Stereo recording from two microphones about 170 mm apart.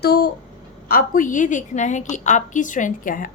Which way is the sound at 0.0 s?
70° left (ahead or behind).